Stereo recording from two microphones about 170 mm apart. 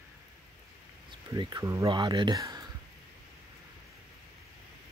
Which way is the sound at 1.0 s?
25° right (ahead or behind).